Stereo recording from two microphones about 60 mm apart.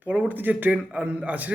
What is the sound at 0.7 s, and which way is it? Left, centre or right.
Speech, centre.